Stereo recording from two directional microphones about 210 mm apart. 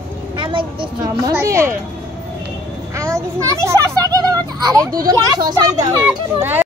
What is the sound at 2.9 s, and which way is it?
A child's voice, 15° right (ahead or behind).